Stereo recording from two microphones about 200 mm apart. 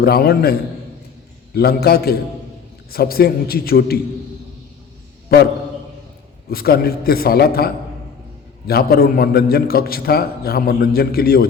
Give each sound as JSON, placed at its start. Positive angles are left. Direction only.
{"t": 0.0, "sound": "a man's voice", "side_deg": 50}
{"t": 1.5, "sound": "a man's voice", "side_deg": 50}
{"t": 6.5, "sound": "a man's voice", "side_deg": 50}